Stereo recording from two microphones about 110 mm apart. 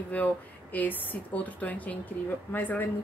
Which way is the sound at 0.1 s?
15° left (ahead or behind).